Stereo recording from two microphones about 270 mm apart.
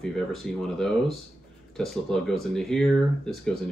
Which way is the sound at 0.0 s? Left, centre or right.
Centre.